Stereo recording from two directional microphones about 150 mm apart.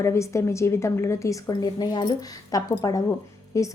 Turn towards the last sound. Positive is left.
turn(degrees=20)  # may be behind; listen again after turning